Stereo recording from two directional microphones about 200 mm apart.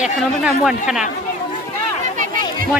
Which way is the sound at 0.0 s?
5° right (ahead or behind).